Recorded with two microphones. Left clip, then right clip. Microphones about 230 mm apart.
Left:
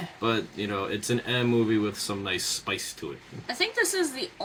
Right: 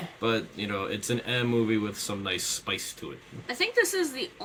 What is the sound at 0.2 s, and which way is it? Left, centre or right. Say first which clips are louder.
Speech: left 1 dB; centre.